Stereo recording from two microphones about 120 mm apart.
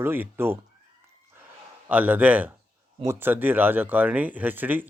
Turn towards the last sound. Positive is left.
turn(degrees=-15)  # may be behind; listen again after turning